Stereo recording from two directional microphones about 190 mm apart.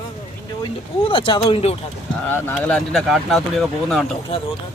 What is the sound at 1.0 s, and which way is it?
Speech, 25° left (ahead or behind).